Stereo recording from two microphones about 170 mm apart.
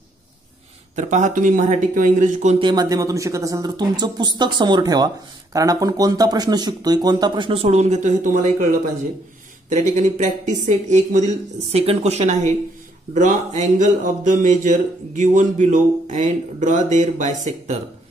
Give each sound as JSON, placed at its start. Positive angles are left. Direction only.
{"t": 0.9, "sound": "speech", "side_deg": -45}
{"t": 2.6, "sound": "speech", "side_deg": -25}
{"t": 7.6, "sound": "speech", "side_deg": -40}
{"t": 9.7, "sound": "speech", "side_deg": -45}